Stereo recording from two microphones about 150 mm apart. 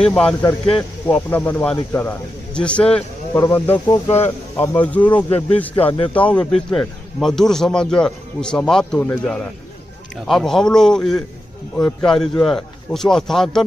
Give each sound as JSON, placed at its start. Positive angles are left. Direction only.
{"t": 0.0, "sound": "a man's voice", "side_deg": 5}
{"t": 4.6, "sound": "a man's voice", "side_deg": 10}